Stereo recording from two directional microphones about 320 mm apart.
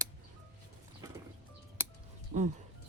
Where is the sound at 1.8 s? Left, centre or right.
Centre.